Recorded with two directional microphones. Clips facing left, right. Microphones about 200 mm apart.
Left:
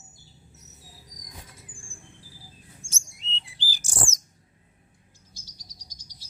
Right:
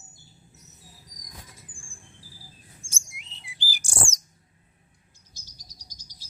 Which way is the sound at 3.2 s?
50° right (ahead or behind).